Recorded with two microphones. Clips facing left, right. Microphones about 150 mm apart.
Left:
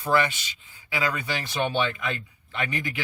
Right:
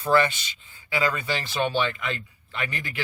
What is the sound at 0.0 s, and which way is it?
Speech, 10° left (ahead or behind).